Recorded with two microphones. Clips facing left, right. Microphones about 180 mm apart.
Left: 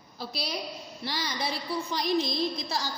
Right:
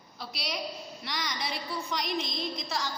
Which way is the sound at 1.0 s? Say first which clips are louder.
Left 4 dB; 30° left (ahead or behind).